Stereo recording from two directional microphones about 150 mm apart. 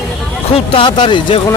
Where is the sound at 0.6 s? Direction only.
30° left (ahead or behind).